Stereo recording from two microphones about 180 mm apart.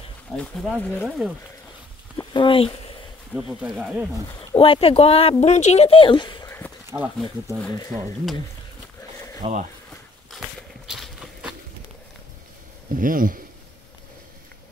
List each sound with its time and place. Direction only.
0.4 s speech: 5° left (ahead or behind)
2.3 s speech: 30° left (ahead or behind)
3.3 s speech: 5° right (ahead or behind)
4.6 s speech: 30° left (ahead or behind)
7.4 s speech: 5° left (ahead or behind)
9.4 s speech: 45° right (ahead or behind)
10.9 s walk: 5° right (ahead or behind)
12.9 s speech: 50° right (ahead or behind)